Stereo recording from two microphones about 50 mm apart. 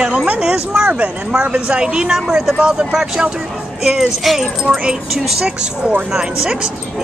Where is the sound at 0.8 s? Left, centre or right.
Right.